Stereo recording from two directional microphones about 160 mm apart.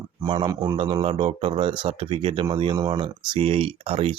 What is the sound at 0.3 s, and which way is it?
Speech, 25° right (ahead or behind).